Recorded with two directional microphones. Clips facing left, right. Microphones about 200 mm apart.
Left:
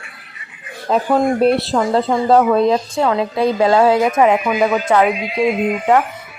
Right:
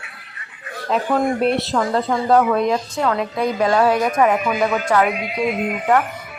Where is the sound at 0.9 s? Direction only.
35° left (ahead or behind).